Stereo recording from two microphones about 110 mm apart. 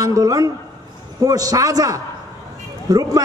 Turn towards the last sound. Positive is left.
turn(degrees=-35)  # may be behind; listen again after turning